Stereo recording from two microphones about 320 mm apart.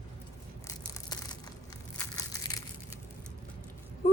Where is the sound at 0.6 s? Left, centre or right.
Centre.